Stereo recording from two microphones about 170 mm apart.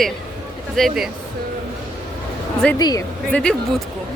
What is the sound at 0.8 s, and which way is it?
Speech, centre (ahead or behind).